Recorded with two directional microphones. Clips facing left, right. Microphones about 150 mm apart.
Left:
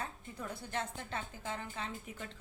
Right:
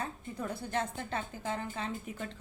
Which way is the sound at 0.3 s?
50° right (ahead or behind).